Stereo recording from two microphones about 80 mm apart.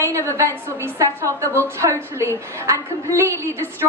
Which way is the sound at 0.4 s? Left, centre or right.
Right.